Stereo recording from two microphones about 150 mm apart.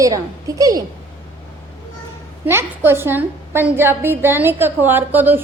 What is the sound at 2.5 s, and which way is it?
A woman's voice, 15° right (ahead or behind).